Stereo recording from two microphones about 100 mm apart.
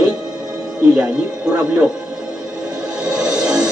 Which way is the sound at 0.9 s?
10° right (ahead or behind).